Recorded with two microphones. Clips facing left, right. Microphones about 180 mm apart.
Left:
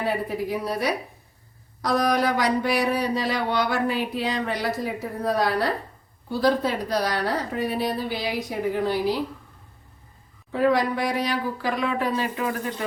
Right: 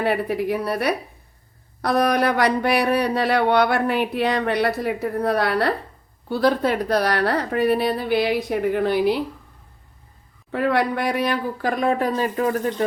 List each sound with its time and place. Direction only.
0.0 s speech: 65° right (ahead or behind)
10.5 s speech: 65° right (ahead or behind); by 12.6 s 40° right (ahead or behind)